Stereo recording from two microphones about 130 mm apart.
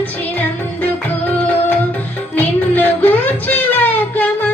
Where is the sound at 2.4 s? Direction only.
15° left (ahead or behind).